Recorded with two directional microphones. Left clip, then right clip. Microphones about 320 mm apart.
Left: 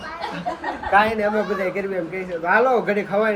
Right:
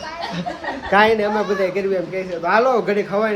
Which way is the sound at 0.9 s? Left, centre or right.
Right.